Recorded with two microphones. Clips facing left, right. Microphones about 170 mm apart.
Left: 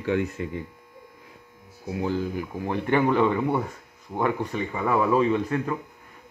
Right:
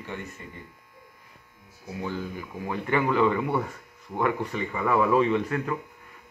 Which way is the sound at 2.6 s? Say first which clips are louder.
Left 3 dB; 25° left (ahead or behind).